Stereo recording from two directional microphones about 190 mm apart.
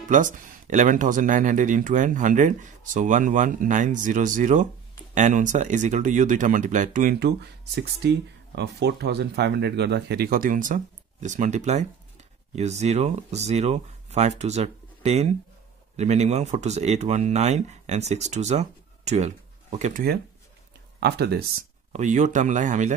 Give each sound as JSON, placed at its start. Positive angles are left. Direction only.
{"t": 0.1, "sound": "speech", "side_deg": -45}
{"t": 21.0, "sound": "speech", "side_deg": -60}
{"t": 21.9, "sound": "speech", "side_deg": -40}